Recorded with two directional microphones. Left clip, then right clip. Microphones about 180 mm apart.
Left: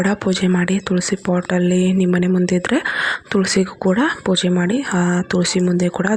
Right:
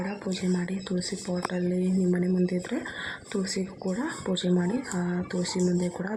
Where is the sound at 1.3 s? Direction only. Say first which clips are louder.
Left 14 dB; 45° left (ahead or behind).